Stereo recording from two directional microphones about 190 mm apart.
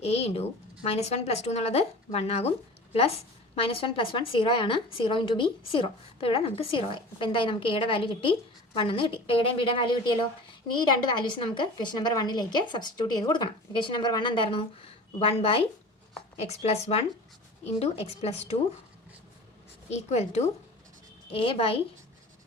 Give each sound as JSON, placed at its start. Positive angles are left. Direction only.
{"t": 0.0, "sound": "speech", "side_deg": 35}
{"t": 3.5, "sound": "a woman's voice", "side_deg": 30}
{"t": 19.9, "sound": "speech", "side_deg": 35}